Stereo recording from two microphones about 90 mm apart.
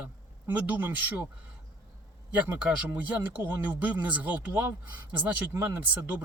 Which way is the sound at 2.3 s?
15° right (ahead or behind).